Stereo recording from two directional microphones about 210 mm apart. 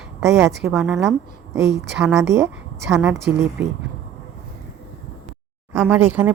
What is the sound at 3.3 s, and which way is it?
Speech, 5° right (ahead or behind).